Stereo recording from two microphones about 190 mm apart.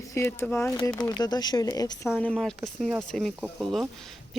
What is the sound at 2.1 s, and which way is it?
Speech, 5° left (ahead or behind).